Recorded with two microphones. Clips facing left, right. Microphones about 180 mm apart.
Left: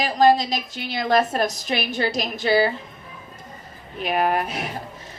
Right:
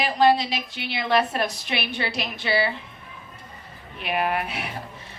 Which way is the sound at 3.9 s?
40° left (ahead or behind).